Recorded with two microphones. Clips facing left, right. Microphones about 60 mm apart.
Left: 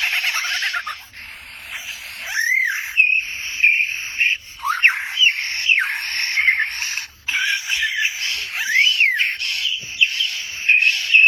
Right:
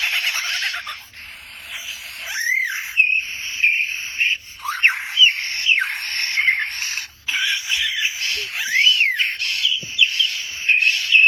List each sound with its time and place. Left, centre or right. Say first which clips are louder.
0.0 s fowl: left 1 dB; left
2.2 s a sound: left 3 dB; left
8.5 s bird: left 1 dB; left